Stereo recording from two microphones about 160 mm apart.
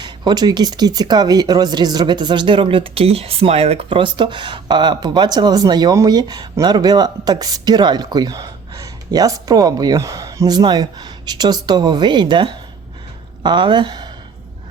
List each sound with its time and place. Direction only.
0.0 s speech: 25° right (ahead or behind)